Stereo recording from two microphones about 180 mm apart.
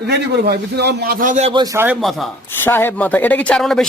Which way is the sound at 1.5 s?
25° right (ahead or behind).